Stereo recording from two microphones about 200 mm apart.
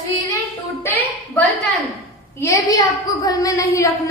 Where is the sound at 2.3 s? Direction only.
15° left (ahead or behind).